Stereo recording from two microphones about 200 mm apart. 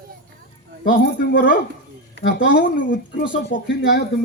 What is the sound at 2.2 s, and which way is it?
Speech, 60° left (ahead or behind).